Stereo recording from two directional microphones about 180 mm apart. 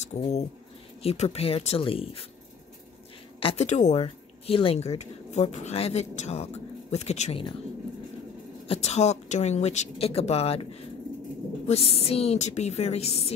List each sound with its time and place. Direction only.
0.0 s speech: 40° left (ahead or behind)
3.3 s speech: 35° left (ahead or behind)
8.6 s speech: 35° left (ahead or behind)